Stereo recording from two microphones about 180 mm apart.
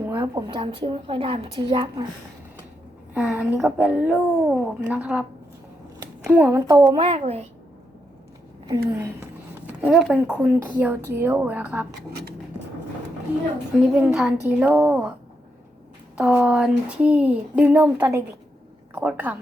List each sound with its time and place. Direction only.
0.2 s a woman's voice: 25° right (ahead or behind)
3.2 s speech: 5° right (ahead or behind)
6.2 s a woman's voice: 10° right (ahead or behind); by 7.4 s 35° right (ahead or behind)
8.9 s speech: 15° right (ahead or behind)
13.7 s a woman's voice: 5° right (ahead or behind)
16.1 s speech: 10° right (ahead or behind)